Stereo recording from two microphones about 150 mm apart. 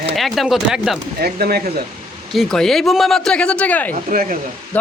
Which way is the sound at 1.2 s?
90° right.